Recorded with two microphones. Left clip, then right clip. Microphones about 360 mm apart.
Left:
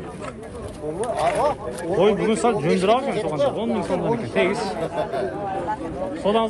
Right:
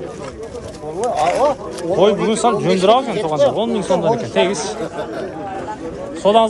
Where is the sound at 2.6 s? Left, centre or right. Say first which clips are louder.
Right 4 dB; right.